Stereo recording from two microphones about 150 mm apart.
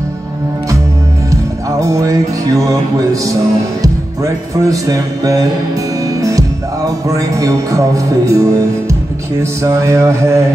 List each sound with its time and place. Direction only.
1.3 s music: 20° right (ahead or behind)
3.8 s speech: 25° right (ahead or behind)
7.3 s mantra: 20° right (ahead or behind)